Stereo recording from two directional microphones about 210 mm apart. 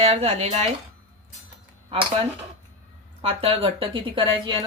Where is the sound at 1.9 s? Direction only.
25° right (ahead or behind).